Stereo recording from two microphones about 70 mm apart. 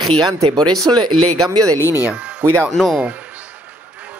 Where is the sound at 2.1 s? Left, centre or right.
Centre.